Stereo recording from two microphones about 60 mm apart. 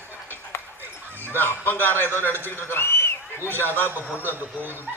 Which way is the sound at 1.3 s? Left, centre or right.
Left.